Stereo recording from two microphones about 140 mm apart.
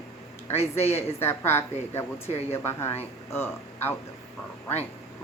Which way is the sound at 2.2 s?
50° left (ahead or behind).